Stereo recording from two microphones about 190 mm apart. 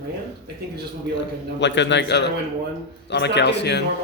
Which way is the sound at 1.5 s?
70° left (ahead or behind).